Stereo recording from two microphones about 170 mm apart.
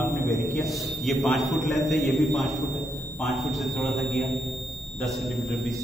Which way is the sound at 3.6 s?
Centre (ahead or behind).